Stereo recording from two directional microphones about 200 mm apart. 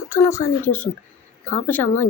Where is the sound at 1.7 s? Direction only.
10° left (ahead or behind).